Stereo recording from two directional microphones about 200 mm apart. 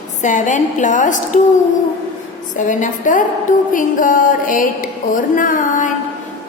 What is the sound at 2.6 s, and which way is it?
A woman's voice, 40° left (ahead or behind).